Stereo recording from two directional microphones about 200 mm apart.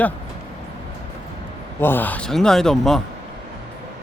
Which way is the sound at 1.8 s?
10° left (ahead or behind).